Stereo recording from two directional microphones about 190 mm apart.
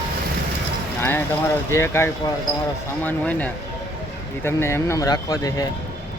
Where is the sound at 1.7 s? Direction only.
15° left (ahead or behind).